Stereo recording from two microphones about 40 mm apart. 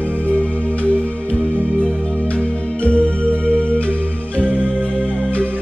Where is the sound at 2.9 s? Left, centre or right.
Left.